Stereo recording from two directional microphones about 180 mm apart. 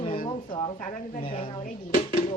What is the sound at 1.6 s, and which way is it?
Speech, 45° left (ahead or behind).